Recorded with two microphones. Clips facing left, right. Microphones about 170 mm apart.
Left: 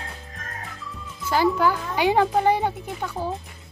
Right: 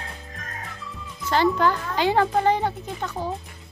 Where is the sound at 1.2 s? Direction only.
5° left (ahead or behind).